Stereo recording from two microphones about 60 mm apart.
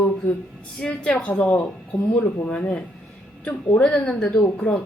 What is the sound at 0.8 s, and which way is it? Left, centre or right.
A woman's voice, centre.